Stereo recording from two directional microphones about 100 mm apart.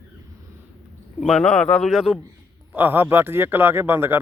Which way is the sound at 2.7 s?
20° right (ahead or behind).